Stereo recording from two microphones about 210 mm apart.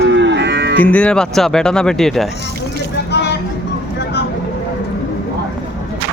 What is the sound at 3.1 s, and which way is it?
Vehicle, 55° left (ahead or behind).